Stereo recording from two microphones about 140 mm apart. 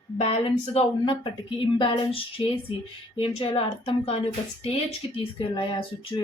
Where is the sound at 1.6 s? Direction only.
40° left (ahead or behind).